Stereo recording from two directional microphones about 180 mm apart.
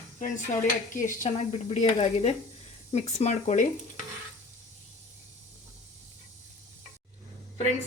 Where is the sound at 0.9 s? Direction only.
45° left (ahead or behind).